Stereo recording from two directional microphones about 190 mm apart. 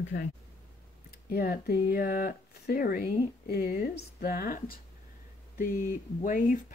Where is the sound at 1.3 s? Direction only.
50° left (ahead or behind).